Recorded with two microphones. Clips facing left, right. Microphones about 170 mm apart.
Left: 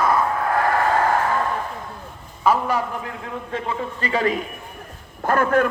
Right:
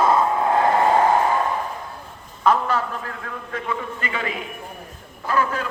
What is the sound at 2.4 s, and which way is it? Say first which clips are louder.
Speech: even; 10° left (ahead or behind).